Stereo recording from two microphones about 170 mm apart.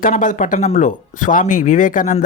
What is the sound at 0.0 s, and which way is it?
Speech, 50° left (ahead or behind).